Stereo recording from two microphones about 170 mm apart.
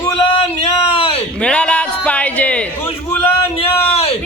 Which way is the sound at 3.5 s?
35° left (ahead or behind).